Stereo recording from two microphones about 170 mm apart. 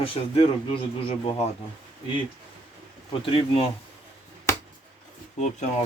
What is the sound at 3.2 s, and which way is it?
Speech, 30° left (ahead or behind).